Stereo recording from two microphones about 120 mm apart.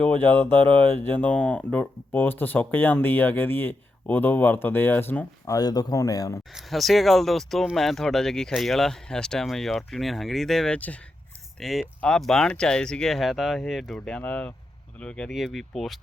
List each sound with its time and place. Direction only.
0.0 s speech: 15° left (ahead or behind)
5.5 s speech: 35° left (ahead or behind)
6.5 s speech: centre (ahead or behind)
11.6 s speech: centre (ahead or behind)